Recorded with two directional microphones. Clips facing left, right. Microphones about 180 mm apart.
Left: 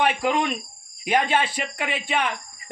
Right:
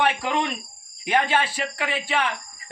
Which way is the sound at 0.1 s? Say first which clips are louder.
Left 3 dB; 15° left (ahead or behind).